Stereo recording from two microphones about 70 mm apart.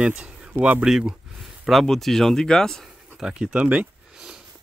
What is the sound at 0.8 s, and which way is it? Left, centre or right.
Speech, centre.